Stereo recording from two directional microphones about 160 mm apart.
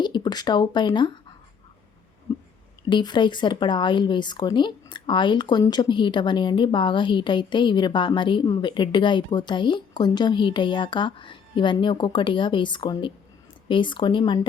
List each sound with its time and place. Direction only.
0.0 s speech: 25° left (ahead or behind)
2.9 s speech: 30° left (ahead or behind)